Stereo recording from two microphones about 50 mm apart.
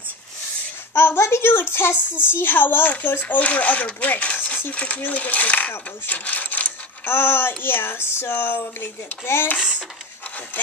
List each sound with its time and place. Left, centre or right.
0.9 s a woman's voice: left
7.1 s speech: left